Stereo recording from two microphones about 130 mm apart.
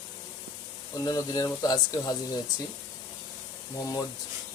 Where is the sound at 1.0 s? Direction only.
30° left (ahead or behind).